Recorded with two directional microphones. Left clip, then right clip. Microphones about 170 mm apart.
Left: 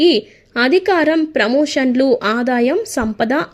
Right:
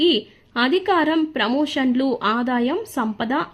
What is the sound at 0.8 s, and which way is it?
A woman's voice, 10° left (ahead or behind).